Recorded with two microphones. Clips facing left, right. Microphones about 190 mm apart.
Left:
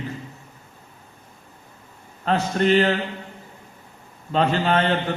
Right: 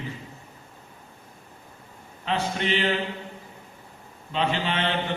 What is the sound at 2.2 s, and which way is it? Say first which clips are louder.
Speech: left 6 dB; 45° left (ahead or behind).